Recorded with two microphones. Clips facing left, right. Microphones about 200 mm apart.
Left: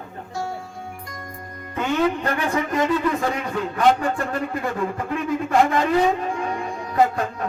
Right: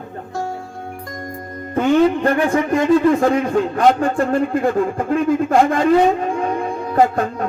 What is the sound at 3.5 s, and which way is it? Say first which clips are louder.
A man's voice: right 4 dB; 50° right (ahead or behind).